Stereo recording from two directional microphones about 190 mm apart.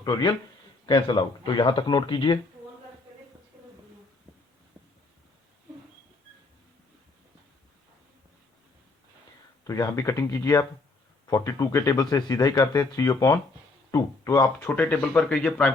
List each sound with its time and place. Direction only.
0.0 s speech: 20° left (ahead or behind)
9.6 s speech: 20° left (ahead or behind)